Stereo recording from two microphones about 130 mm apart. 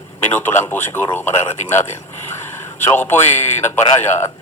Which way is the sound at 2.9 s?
15° left (ahead or behind).